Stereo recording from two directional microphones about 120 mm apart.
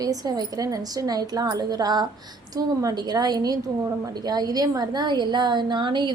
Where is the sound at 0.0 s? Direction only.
30° right (ahead or behind).